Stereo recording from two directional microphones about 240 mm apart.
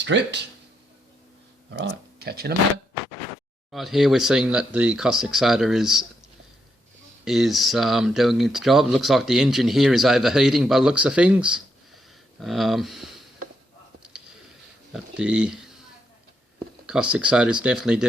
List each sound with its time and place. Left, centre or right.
0.0 s speech: right
1.7 s speech: right
3.7 s speech: centre
7.3 s speech: centre
14.9 s speech: centre
16.8 s speech: centre